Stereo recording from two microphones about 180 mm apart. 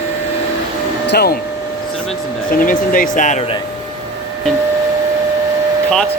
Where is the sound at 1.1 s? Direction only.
60° left (ahead or behind).